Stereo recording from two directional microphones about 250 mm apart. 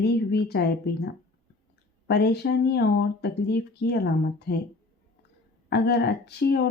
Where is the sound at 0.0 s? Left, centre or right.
Left.